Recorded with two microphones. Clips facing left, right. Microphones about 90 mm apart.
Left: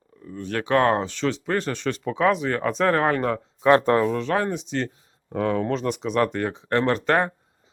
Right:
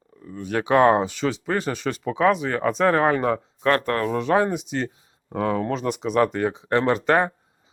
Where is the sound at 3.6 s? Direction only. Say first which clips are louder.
Left 5 dB; 20° left (ahead or behind).